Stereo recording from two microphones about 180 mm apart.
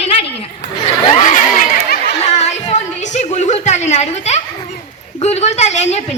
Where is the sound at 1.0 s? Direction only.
45° left (ahead or behind).